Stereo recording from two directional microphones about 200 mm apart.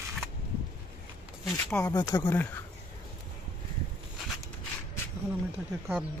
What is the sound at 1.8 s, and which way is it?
Speech, 20° left (ahead or behind).